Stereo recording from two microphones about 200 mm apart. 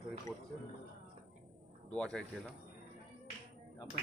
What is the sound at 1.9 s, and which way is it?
Speech, 5° left (ahead or behind).